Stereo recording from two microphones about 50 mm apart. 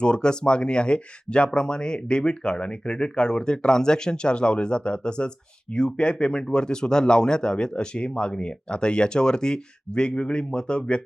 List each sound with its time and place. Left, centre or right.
0.0 s speech: centre